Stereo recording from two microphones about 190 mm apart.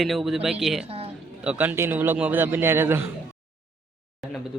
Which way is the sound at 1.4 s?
5° right (ahead or behind).